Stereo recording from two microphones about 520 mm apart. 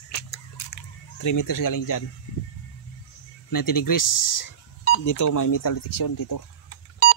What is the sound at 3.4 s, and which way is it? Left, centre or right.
Speech, left.